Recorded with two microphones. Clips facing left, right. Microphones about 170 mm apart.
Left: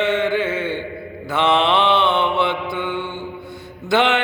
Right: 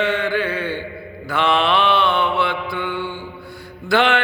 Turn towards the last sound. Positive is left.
turn(degrees=20)  # may be behind; listen again after turning